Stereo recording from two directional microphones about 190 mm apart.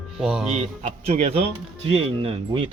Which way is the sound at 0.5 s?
35° right (ahead or behind).